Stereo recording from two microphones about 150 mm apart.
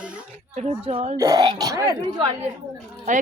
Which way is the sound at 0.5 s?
45° right (ahead or behind).